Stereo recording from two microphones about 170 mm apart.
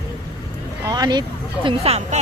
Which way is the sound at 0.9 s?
25° right (ahead or behind).